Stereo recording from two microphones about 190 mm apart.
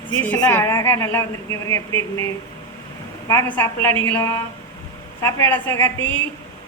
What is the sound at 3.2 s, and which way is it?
A man's voice, 15° left (ahead or behind).